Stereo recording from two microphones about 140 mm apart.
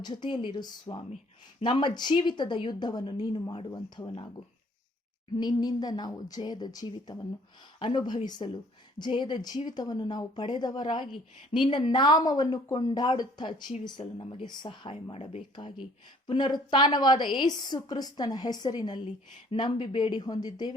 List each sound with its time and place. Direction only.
0.0 s a woman's voice: 30° left (ahead or behind)
5.4 s a woman's voice: 30° left (ahead or behind)